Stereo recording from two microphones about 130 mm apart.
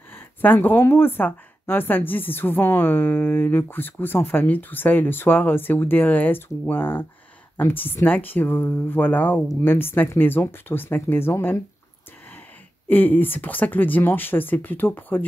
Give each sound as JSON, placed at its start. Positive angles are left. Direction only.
{"t": 0.1, "sound": "speech", "side_deg": 15}
{"t": 12.8, "sound": "speech", "side_deg": 15}